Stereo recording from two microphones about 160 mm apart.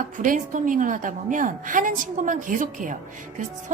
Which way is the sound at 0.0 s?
55° right (ahead or behind).